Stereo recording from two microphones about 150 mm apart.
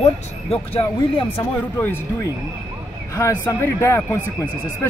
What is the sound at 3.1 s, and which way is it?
Speech, 20° left (ahead or behind).